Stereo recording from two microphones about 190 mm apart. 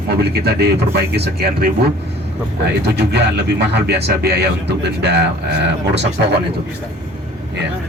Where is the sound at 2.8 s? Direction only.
60° right (ahead or behind).